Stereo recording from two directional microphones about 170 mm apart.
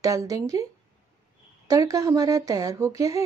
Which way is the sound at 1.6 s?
20° right (ahead or behind).